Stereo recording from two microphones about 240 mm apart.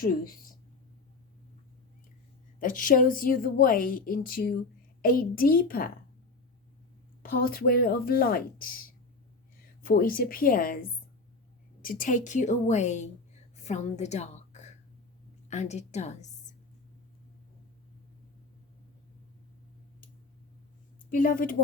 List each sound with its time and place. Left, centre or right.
0.0 s a woman's voice: left
2.6 s a woman's voice: left
7.2 s a woman's voice: left
13.6 s a sound: left
15.4 s a woman's voice: left
21.1 s a woman's voice: left